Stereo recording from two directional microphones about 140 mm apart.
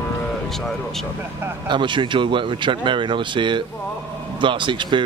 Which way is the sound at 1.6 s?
35° right (ahead or behind).